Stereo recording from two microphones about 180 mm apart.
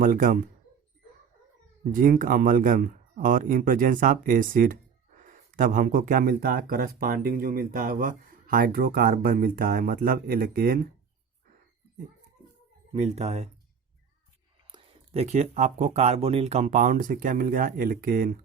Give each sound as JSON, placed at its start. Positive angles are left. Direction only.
{"t": 0.0, "sound": "speech", "side_deg": -50}
{"t": 1.8, "sound": "speech", "side_deg": -50}
{"t": 12.9, "sound": "speech", "side_deg": -40}
{"t": 14.7, "sound": "speech", "side_deg": -30}